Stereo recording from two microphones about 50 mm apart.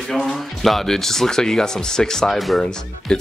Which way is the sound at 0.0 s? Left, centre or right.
Centre.